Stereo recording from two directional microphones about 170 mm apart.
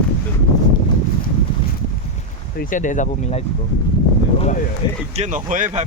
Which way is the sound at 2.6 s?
50° left (ahead or behind).